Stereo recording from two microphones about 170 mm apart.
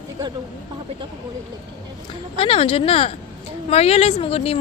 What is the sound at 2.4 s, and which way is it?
Speech, 35° left (ahead or behind).